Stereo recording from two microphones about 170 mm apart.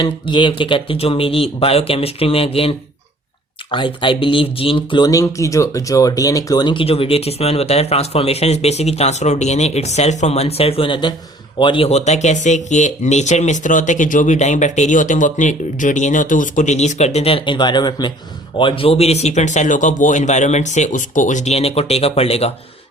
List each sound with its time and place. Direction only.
0.0 s speech: 30° left (ahead or behind)